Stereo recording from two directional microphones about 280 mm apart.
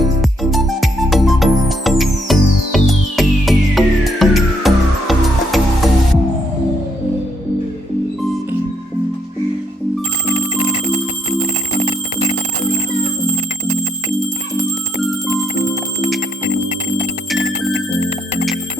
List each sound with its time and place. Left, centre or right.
0.2 s music: centre